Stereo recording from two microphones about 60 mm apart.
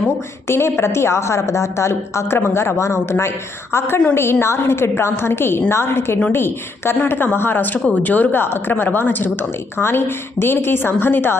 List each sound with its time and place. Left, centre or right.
0.4 s a woman's voice: left